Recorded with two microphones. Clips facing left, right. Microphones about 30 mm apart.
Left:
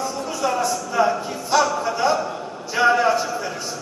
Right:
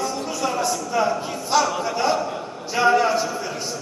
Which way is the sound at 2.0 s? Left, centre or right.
Centre.